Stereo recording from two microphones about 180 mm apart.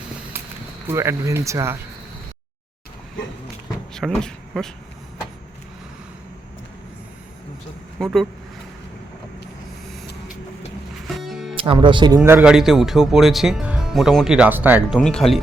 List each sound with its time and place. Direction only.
0.9 s speech: 15° right (ahead or behind)
4.1 s speech: 5° left (ahead or behind)
7.9 s speech: centre (ahead or behind)
11.1 s music: centre (ahead or behind)
11.5 s speech: 30° right (ahead or behind)
12.2 s speech: 10° right (ahead or behind)
14.9 s speech: 5° left (ahead or behind)